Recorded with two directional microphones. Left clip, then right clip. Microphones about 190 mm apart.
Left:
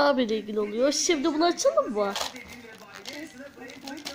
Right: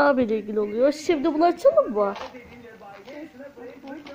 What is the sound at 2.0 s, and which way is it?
Speech, 15° left (ahead or behind).